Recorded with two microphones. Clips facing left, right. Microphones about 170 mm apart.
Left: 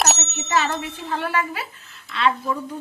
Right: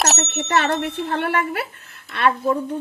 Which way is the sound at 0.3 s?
65° right (ahead or behind).